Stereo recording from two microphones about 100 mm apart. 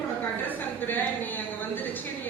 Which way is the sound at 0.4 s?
20° left (ahead or behind).